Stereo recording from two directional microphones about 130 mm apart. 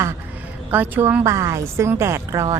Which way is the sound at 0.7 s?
15° right (ahead or behind).